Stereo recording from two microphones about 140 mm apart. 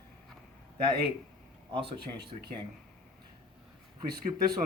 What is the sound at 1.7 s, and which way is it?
Speech, 35° right (ahead or behind).